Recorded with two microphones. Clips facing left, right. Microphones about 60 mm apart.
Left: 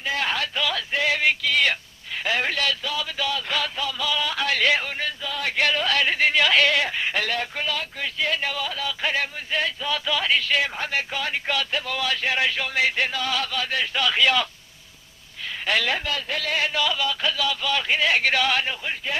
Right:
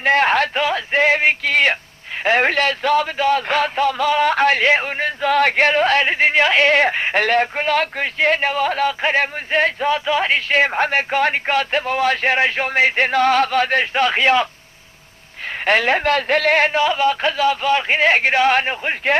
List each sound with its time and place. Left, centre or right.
0.0 s a sound: right
2.2 s speech: right
5.3 s speech: right
5.5 s speech: right
15.6 s a man's voice: right
16.7 s speech: right